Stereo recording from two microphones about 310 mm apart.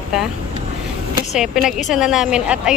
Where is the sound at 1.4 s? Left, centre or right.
Centre.